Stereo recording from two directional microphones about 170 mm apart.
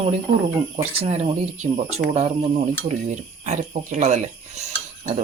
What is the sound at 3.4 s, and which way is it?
Speech, 45° right (ahead or behind).